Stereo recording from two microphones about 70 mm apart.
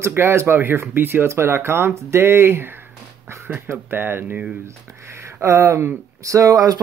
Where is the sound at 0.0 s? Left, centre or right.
Right.